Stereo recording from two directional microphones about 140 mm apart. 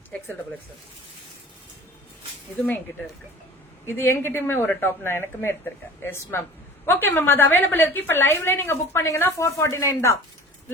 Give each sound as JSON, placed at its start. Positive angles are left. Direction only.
{"t": 3.8, "sound": "a woman's voice", "side_deg": 15}